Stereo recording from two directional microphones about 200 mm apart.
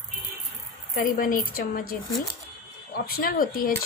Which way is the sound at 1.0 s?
45° left (ahead or behind).